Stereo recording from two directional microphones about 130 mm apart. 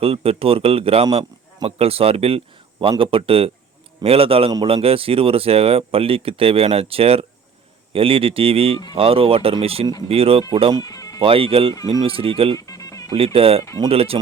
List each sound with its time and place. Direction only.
0.0 s speech: 50° right (ahead or behind)
10.8 s music: 25° left (ahead or behind)
11.2 s speech: 45° right (ahead or behind)
12.5 s music: 25° left (ahead or behind)
13.1 s speech: 45° right (ahead or behind)